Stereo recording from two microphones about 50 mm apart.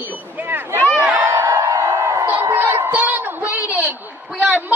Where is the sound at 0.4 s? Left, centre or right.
Right.